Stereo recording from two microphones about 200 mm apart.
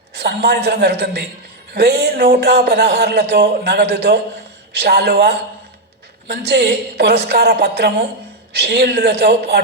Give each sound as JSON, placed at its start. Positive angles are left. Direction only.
{"t": 0.1, "sound": "speech", "side_deg": -55}